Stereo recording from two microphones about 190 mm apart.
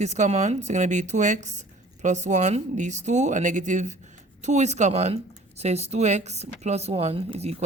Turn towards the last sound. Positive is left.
turn(degrees=-35)  # may be behind; listen again after turning